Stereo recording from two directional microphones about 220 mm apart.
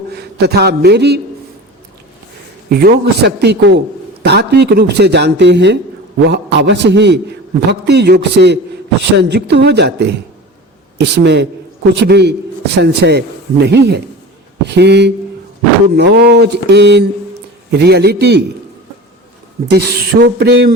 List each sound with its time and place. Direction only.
0.1 s a man's voice: 45° right (ahead or behind)
2.6 s a man's voice: 45° right (ahead or behind)
19.7 s a man's voice: 45° right (ahead or behind)